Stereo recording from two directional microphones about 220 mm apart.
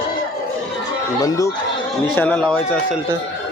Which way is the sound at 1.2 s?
15° left (ahead or behind).